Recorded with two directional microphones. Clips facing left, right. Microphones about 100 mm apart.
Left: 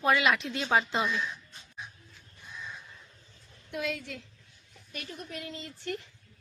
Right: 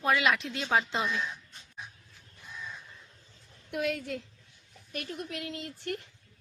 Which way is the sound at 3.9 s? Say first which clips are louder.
Right 5 dB; 50° right (ahead or behind).